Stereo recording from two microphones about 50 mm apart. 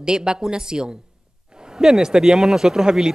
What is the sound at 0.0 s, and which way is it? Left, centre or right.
Speech, centre.